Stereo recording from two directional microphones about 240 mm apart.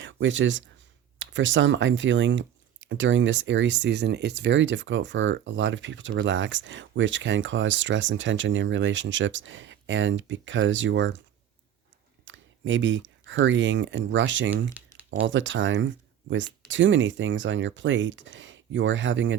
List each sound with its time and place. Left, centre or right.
0.0 s speech: right
12.2 s speech: right